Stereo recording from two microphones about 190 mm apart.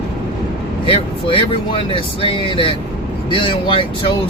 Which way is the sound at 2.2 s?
25° left (ahead or behind).